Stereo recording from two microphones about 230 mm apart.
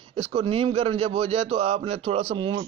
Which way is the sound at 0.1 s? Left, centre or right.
Right.